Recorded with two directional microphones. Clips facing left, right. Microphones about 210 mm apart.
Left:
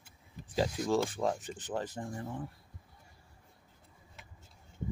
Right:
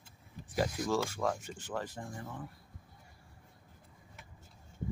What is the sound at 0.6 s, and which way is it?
Speech, 20° left (ahead or behind).